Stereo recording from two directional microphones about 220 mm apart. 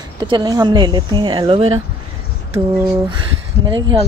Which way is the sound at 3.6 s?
20° right (ahead or behind).